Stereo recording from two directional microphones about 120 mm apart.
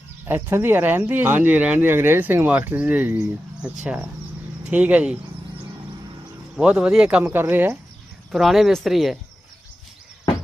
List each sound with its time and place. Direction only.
0.3 s speech: 20° right (ahead or behind)
6.6 s speech: 5° right (ahead or behind)
8.3 s speech: centre (ahead or behind)